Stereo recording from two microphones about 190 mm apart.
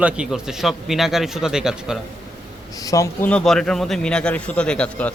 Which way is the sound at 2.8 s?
15° left (ahead or behind).